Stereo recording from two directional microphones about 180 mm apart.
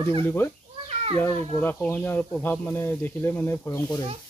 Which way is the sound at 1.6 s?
10° left (ahead or behind).